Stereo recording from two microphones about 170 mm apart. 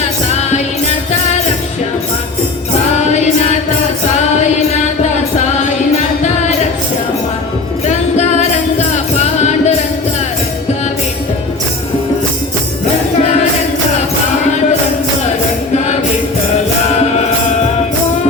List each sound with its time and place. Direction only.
7.9 s music: 40° left (ahead or behind)